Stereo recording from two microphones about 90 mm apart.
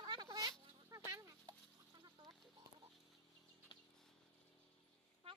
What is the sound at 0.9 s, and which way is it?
Chicken, 40° right (ahead or behind).